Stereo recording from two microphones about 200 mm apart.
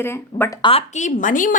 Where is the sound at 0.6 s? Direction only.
30° left (ahead or behind).